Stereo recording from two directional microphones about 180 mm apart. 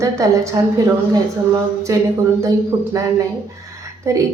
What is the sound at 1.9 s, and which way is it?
Speech, 20° right (ahead or behind).